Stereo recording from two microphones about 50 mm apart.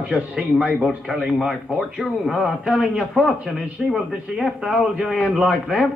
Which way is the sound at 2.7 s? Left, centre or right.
Centre.